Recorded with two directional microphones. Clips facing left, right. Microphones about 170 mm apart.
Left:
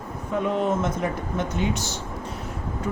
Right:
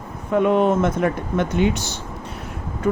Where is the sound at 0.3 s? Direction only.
65° right (ahead or behind).